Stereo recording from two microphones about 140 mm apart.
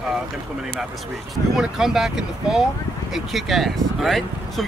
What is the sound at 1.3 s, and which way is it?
Speech, centre (ahead or behind).